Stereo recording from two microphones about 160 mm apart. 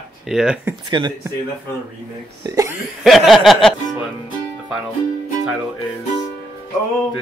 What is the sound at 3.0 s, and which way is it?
Music, centre (ahead or behind).